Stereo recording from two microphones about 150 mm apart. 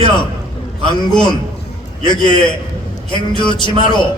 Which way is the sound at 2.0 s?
30° left (ahead or behind).